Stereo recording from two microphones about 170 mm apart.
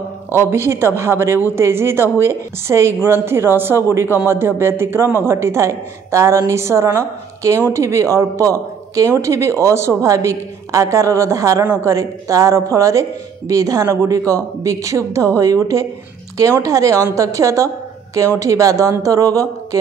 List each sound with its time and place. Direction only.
0.3 s speech: 15° right (ahead or behind)